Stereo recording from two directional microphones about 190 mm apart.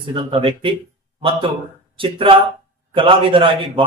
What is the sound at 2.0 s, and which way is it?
A man's voice, 25° right (ahead or behind).